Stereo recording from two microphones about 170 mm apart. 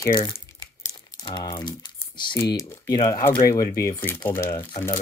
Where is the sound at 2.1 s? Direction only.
25° left (ahead or behind).